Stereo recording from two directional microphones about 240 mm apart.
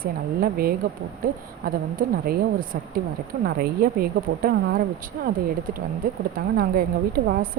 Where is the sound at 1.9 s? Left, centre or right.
Right.